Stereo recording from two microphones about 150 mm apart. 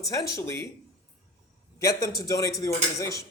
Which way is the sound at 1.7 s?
20° left (ahead or behind).